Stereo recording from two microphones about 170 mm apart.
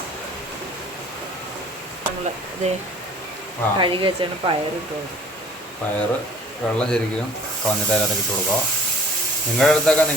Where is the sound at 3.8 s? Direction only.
30° right (ahead or behind).